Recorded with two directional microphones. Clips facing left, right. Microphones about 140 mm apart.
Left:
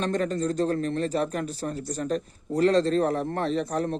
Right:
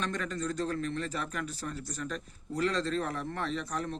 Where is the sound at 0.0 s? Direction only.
30° left (ahead or behind).